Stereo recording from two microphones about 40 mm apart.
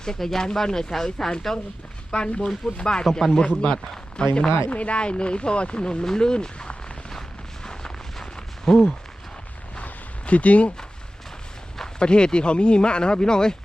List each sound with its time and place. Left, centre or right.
0.0 s speech: centre
2.0 s speech: left
3.1 s speech: centre
3.5 s speech: centre
6.1 s a sound: centre
9.8 s a sound: left
11.9 s speech: left